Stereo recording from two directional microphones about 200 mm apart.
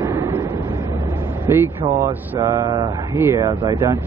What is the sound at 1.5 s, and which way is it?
Speech, 10° right (ahead or behind).